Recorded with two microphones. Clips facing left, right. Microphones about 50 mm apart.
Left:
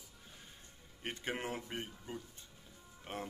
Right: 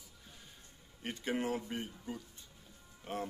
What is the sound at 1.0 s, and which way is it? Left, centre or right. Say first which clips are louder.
A man's voice: right 4 dB; left.